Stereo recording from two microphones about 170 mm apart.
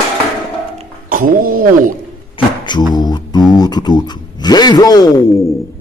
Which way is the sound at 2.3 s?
25° left (ahead or behind).